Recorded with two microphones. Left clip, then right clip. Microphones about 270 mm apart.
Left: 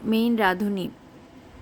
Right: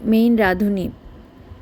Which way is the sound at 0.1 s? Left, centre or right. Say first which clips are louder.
Right 5 dB; centre.